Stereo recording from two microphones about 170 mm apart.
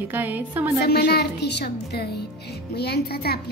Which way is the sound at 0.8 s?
70° left (ahead or behind).